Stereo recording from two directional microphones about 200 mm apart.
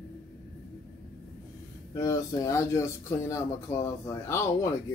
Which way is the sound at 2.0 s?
15° left (ahead or behind).